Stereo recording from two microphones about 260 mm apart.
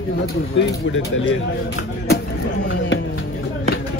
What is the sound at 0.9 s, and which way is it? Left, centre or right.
Speech, left.